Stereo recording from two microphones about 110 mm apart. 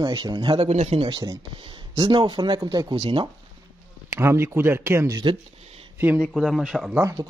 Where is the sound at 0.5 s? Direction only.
80° right; by 3.3 s 50° right (ahead or behind).